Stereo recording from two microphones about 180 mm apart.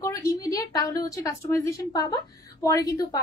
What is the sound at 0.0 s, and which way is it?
A woman's voice, 15° left (ahead or behind).